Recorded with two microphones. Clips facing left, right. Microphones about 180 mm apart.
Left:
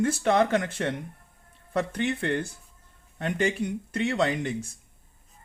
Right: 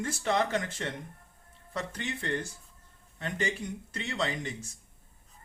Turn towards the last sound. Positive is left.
turn(degrees=60)  # may be behind; listen again after turning